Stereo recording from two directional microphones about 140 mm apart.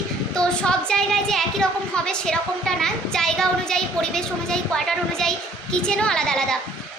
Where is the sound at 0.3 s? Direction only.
5° left (ahead or behind).